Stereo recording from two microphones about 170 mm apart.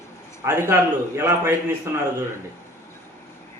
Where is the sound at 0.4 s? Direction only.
15° right (ahead or behind).